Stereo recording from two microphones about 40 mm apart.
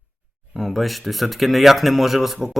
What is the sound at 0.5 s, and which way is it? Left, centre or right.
Speech, centre.